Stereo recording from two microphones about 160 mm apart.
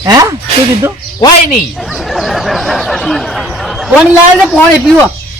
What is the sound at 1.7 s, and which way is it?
Speech, centre (ahead or behind).